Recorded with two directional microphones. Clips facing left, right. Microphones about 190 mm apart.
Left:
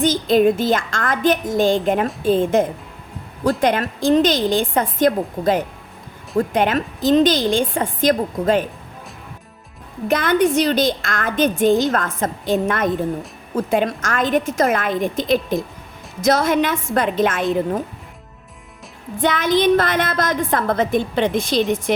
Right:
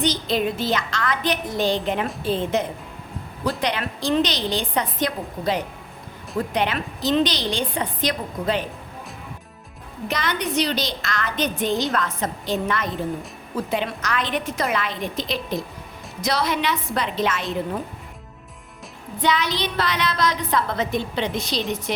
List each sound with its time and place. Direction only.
0.0 s a woman's voice: 50° left (ahead or behind)
10.1 s a woman's voice: 50° left (ahead or behind)
19.2 s a woman's voice: 50° left (ahead or behind)